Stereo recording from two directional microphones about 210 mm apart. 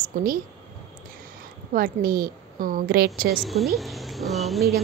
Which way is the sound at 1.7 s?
45° right (ahead or behind).